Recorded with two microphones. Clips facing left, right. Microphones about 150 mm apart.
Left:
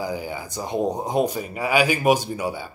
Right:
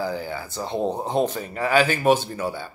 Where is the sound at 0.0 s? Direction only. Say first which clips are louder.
Right 1 dB; 15° left (ahead or behind).